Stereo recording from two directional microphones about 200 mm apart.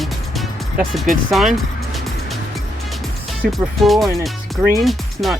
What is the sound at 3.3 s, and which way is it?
Speech, centre (ahead or behind).